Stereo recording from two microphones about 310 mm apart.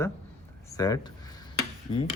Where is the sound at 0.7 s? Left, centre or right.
Centre.